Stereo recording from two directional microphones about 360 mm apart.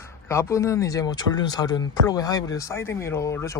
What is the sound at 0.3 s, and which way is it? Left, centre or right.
Speech, centre.